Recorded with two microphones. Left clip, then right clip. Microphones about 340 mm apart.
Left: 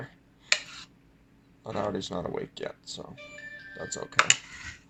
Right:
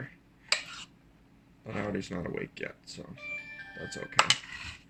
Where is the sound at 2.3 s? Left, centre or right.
Left.